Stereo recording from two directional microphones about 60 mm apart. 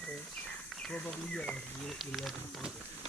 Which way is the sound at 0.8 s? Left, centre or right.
Centre.